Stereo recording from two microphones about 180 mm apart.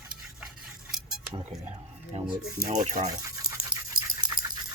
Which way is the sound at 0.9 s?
5° right (ahead or behind).